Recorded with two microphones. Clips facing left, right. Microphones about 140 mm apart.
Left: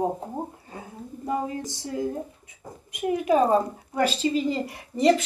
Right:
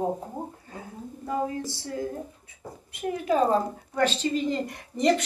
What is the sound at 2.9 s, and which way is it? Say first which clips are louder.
A woman's voice: left 4 dB; 15° left (ahead or behind).